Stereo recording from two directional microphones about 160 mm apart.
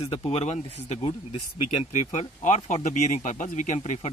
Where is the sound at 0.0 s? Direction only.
30° left (ahead or behind).